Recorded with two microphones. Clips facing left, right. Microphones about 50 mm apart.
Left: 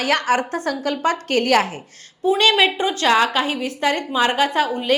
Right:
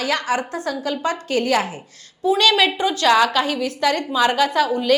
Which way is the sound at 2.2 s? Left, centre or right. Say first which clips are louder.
Even; left.